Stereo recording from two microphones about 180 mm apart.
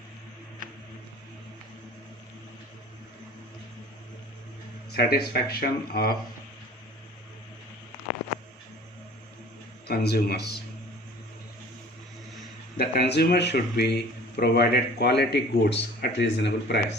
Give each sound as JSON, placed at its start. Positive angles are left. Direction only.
{"t": 4.9, "sound": "speech", "side_deg": 60}
{"t": 9.8, "sound": "speech", "side_deg": 65}
{"t": 12.7, "sound": "speech", "side_deg": 60}